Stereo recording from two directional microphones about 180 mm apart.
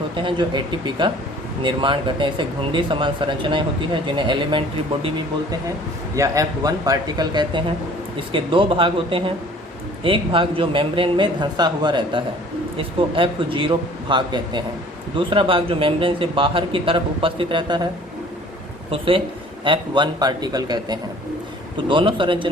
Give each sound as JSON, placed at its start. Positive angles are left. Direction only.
{"t": 0.2, "sound": "speech", "side_deg": -25}
{"t": 18.9, "sound": "speech", "side_deg": -30}